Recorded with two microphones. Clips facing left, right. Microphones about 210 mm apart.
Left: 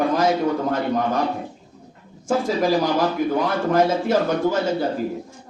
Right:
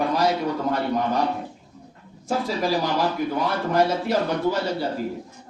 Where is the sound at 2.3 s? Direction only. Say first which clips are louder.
Left 4 dB; 50° left (ahead or behind).